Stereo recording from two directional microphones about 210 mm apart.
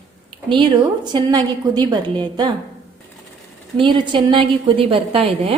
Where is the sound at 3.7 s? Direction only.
25° right (ahead or behind).